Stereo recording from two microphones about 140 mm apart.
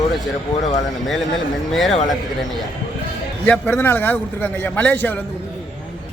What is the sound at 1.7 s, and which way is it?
Speech, centre (ahead or behind).